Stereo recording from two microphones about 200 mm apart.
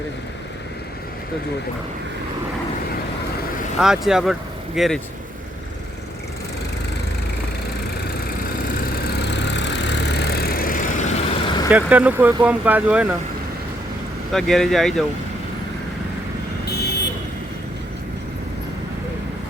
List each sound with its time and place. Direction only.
3.8 s speech: 5° right (ahead or behind)
9.1 s vehicle: 60° left (ahead or behind); by 11.3 s 35° left (ahead or behind)
11.4 s vehicle: 20° left (ahead or behind)
11.7 s speech: 10° right (ahead or behind)
14.3 s speech: centre (ahead or behind)